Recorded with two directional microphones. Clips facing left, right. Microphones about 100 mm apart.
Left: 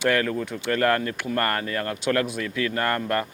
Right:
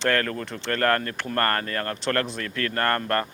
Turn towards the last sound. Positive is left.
turn(degrees=10)  # may be behind; listen again after turning